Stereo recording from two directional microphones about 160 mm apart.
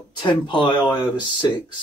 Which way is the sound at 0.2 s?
30° left (ahead or behind).